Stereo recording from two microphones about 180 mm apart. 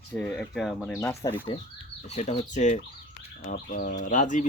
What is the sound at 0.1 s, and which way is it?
Speech, 5° left (ahead or behind).